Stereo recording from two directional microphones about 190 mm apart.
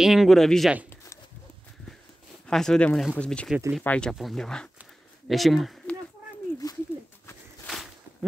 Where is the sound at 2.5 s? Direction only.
5° left (ahead or behind).